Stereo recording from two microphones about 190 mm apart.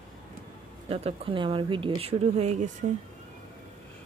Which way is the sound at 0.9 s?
30° right (ahead or behind).